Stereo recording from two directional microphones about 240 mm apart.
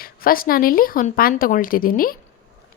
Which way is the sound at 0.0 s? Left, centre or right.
Left.